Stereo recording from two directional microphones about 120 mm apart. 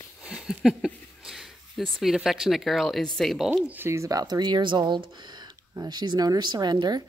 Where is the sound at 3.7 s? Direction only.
20° right (ahead or behind).